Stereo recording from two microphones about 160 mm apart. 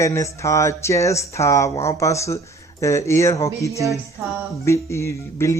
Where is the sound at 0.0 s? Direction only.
20° left (ahead or behind).